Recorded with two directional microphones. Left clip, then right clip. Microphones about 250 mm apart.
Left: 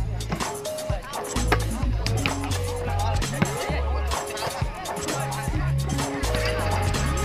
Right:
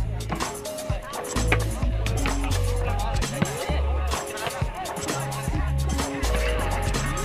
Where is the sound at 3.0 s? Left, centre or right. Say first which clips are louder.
Left 1 dB; centre.